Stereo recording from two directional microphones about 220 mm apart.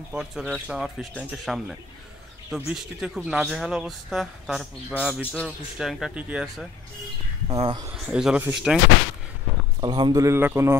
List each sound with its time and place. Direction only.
0.1 s speech: centre (ahead or behind)
7.4 s speech: 25° right (ahead or behind)
7.9 s speech: 5° right (ahead or behind)
9.8 s speech: 20° right (ahead or behind)